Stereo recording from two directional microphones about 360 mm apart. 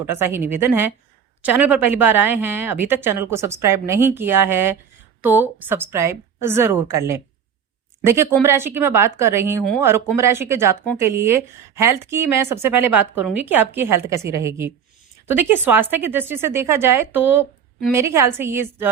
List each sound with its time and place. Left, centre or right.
0.0 s a woman's voice: centre